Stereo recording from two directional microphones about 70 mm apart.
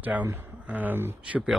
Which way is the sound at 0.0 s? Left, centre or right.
Right.